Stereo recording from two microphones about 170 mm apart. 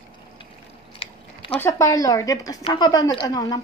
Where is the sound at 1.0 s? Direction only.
35° left (ahead or behind).